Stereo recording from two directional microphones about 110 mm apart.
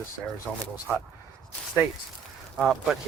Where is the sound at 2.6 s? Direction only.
5° right (ahead or behind).